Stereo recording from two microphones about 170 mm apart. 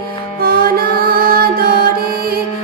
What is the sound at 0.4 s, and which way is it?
Music, 60° right (ahead or behind).